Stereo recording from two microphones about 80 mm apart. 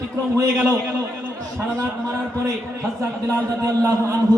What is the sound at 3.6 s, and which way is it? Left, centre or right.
Speech, right.